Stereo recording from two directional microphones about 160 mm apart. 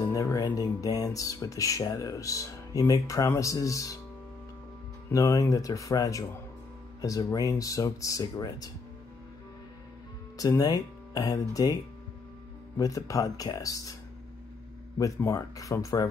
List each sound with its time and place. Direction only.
0.1 s speech: 20° left (ahead or behind)
5.1 s speech: 20° left (ahead or behind)
10.3 s speech: 20° left (ahead or behind)
15.0 s speech: 20° left (ahead or behind)